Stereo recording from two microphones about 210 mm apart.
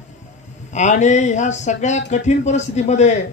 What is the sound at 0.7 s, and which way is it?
A man's voice, 35° left (ahead or behind).